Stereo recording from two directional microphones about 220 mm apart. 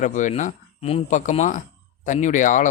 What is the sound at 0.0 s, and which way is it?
Speech, 35° left (ahead or behind).